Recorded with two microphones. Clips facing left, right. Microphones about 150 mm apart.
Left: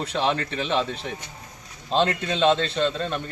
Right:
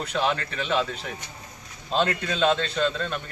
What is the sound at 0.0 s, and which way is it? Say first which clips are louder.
A man's voice: left 1 dB; 30° left (ahead or behind).